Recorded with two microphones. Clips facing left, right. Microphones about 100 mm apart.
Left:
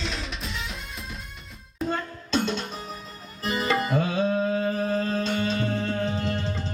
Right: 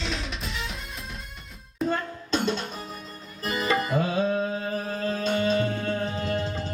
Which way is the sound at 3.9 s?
30° right (ahead or behind).